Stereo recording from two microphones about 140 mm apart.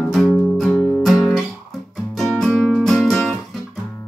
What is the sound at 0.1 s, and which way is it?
Music, centre (ahead or behind).